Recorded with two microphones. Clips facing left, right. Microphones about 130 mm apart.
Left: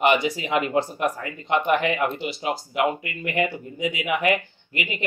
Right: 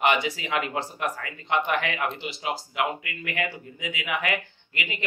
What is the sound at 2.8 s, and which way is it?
Speech, 30° left (ahead or behind).